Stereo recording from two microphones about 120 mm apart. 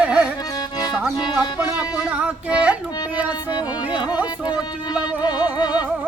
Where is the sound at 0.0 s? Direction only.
10° right (ahead or behind).